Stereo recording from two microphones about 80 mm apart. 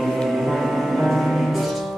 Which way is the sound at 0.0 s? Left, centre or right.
Centre.